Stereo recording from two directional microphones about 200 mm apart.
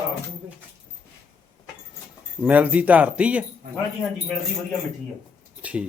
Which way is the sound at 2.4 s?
5° right (ahead or behind).